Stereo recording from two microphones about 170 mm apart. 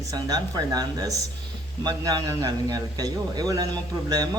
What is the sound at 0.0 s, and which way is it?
Speech, 20° right (ahead or behind).